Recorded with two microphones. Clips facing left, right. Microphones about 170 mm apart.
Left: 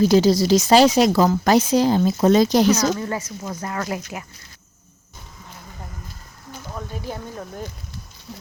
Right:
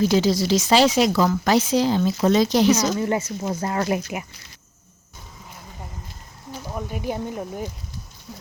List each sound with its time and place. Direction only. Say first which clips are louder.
0.1 s speech: left 4 dB; 40° left (ahead or behind)
2.7 s speech: even; 20° right (ahead or behind)
6.7 s speech: right 3 dB; 15° right (ahead or behind)
8.3 s speech: left 2 dB; 5° left (ahead or behind)